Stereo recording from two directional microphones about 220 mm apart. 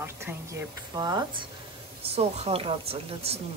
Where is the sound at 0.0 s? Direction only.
10° right (ahead or behind).